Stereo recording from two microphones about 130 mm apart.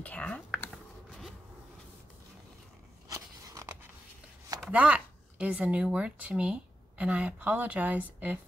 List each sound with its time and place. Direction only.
0.0 s computer keyboard: 10° left (ahead or behind)
3.1 s biting: 25° right (ahead or behind)
4.6 s speech: 10° right (ahead or behind)